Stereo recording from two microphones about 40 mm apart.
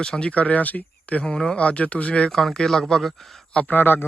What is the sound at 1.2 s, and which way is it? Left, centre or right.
Speech, centre.